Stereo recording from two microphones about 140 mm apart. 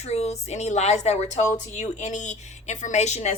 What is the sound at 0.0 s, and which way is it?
A woman's voice, 50° left (ahead or behind).